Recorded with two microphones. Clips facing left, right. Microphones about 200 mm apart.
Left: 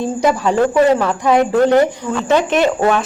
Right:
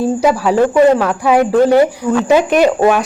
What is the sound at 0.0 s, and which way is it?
Speech, 10° right (ahead or behind).